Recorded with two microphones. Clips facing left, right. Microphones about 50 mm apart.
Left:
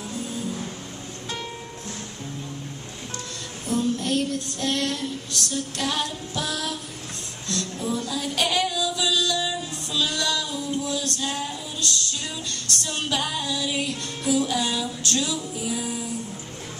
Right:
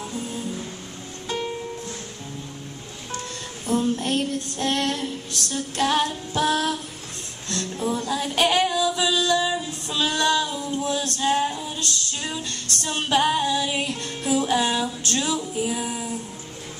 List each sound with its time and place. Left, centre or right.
3.6 s child singing: right
7.4 s music: right